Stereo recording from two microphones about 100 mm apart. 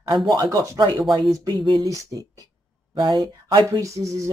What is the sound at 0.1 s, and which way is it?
Speech, 45° right (ahead or behind).